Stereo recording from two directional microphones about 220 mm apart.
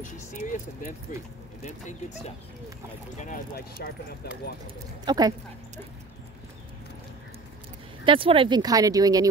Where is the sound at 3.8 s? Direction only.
50° left (ahead or behind).